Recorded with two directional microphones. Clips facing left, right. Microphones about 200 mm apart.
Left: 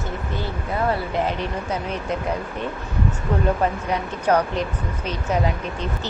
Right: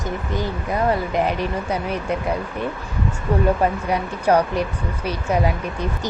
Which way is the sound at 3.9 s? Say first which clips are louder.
Right 2 dB; 10° right (ahead or behind).